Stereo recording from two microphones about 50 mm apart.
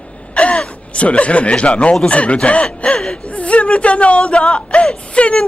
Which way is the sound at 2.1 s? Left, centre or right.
Left.